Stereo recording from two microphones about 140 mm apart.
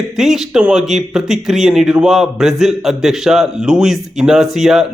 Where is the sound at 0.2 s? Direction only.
Centre (ahead or behind).